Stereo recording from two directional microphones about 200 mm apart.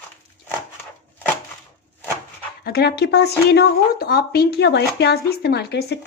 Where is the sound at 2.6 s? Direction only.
50° left (ahead or behind).